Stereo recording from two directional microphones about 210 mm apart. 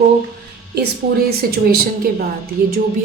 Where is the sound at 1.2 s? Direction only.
45° right (ahead or behind).